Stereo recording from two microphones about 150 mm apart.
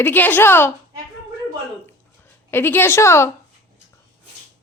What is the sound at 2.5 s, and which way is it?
Speech, 15° left (ahead or behind).